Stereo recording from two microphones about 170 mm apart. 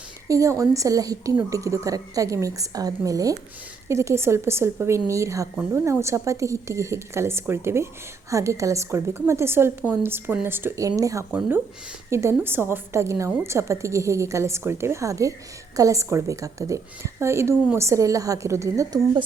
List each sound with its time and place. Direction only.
0.3 s a woman's voice: 20° right (ahead or behind)